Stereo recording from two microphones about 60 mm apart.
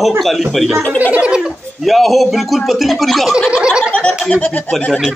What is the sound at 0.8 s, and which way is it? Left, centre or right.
Speech, left.